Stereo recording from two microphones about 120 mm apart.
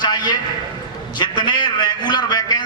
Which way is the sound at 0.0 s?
35° left (ahead or behind).